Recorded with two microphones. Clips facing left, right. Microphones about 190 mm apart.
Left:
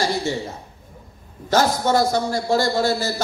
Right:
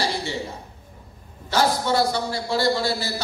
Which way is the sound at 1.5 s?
45° left (ahead or behind).